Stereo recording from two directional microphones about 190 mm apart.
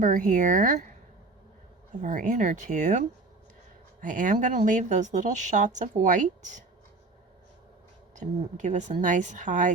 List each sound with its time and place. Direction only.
0.0 s speech: 45° right (ahead or behind)
2.0 s speech: 45° right (ahead or behind)
8.1 s speech: 40° right (ahead or behind)